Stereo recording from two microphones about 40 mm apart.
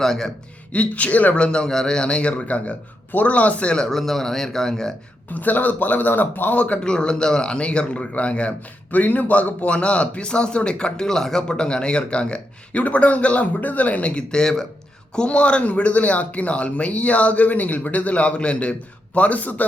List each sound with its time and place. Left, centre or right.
0.0 s a man's voice: centre
0.7 s speech: left
3.1 s speech: left
3.8 s speech: centre
5.3 s speech: left
6.8 s speech: left
8.9 s speech: left; by 14.6 s centre
15.1 s speech: left